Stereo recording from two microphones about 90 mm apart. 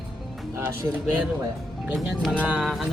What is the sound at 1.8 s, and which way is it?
Speech, 10° right (ahead or behind).